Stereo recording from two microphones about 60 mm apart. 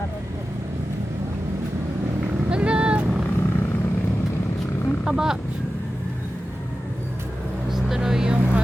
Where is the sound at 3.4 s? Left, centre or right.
Left.